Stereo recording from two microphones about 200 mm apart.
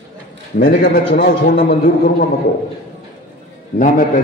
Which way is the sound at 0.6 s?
60° left (ahead or behind).